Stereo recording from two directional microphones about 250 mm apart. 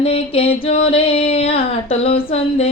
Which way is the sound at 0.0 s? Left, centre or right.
Left.